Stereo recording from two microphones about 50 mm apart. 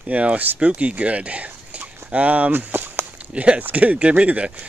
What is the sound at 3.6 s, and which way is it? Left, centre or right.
Speech, right.